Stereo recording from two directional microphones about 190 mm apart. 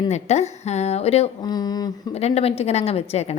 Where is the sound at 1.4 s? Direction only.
20° left (ahead or behind).